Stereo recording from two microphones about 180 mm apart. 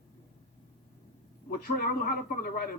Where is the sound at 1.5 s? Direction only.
55° left (ahead or behind).